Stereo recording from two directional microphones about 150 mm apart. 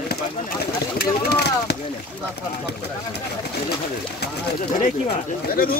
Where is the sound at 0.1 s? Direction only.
90° left.